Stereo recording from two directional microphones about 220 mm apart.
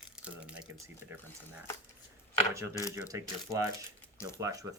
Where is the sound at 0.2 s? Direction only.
5° right (ahead or behind).